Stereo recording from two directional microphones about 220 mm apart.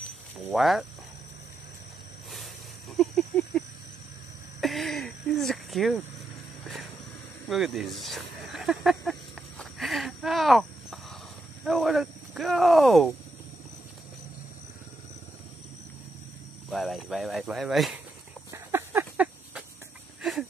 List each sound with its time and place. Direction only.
0.4 s speech: centre (ahead or behind)
3.0 s cricket: centre (ahead or behind)
7.4 s snake: centre (ahead or behind)
9.6 s a sound: centre (ahead or behind)
11.6 s speech: centre (ahead or behind)
16.7 s speech: centre (ahead or behind)
18.5 s a sound: 10° right (ahead or behind)